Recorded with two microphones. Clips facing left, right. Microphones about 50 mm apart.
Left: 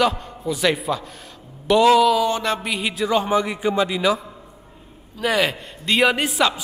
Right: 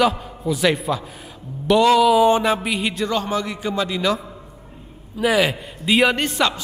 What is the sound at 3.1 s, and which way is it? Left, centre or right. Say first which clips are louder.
A man's voice: left 3 dB; centre.